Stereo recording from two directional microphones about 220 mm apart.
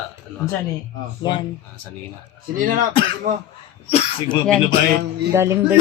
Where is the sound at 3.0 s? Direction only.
25° left (ahead or behind).